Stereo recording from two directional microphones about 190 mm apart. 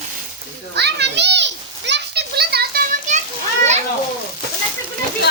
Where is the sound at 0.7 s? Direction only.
60° right (ahead or behind); by 3.2 s 45° right (ahead or behind).